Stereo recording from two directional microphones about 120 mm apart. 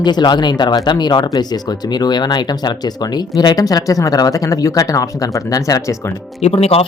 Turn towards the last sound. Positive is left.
turn(degrees=60)  # may be behind; listen again after turning